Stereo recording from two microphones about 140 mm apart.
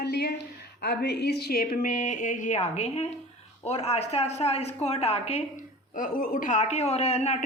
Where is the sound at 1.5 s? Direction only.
85° left; by 5.6 s 50° left (ahead or behind).